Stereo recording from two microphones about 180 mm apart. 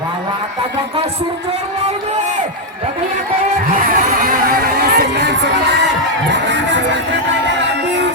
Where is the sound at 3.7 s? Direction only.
50° right (ahead or behind); by 5.8 s 70° right (ahead or behind).